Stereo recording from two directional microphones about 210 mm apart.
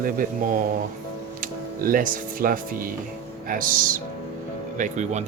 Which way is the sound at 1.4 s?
40° right (ahead or behind).